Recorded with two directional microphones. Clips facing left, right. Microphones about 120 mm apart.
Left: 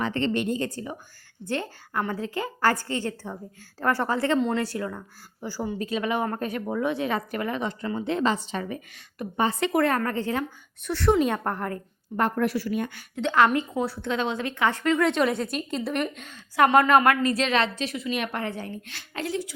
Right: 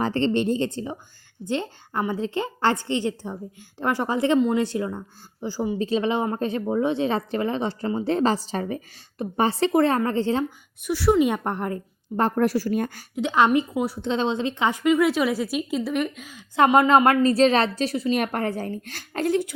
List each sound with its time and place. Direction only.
0.0 s speech: 30° right (ahead or behind)
10.8 s a woman's voice: 10° right (ahead or behind)
11.4 s a woman's voice: 20° right (ahead or behind); by 13.1 s 40° right (ahead or behind)
13.1 s a woman's voice: 15° right (ahead or behind)
14.1 s a woman's voice: 25° right (ahead or behind); by 16.4 s 5° right (ahead or behind)
16.6 s a woman's voice: 20° right (ahead or behind); by 19.5 s 55° right (ahead or behind)